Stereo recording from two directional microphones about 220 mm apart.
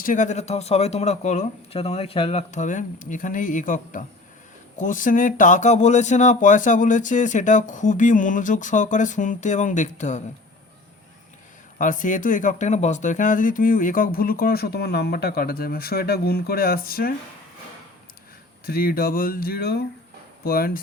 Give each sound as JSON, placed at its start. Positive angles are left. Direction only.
{"t": 0.0, "sound": "speech", "side_deg": 35}
{"t": 11.8, "sound": "speech", "side_deg": 35}
{"t": 18.6, "sound": "speech", "side_deg": 45}